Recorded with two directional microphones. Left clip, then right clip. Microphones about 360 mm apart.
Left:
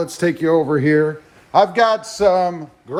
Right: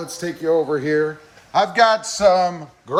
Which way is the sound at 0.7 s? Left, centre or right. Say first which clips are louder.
Left 3 dB; centre.